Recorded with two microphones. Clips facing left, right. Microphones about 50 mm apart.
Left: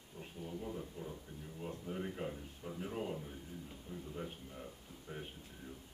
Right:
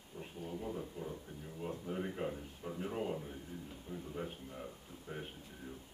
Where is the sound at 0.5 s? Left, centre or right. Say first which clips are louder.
Right 2 dB; centre.